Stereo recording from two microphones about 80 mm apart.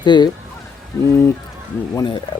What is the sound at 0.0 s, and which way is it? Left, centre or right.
Speech, left.